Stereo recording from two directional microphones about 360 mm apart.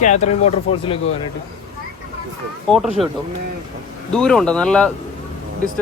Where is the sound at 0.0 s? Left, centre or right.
Centre.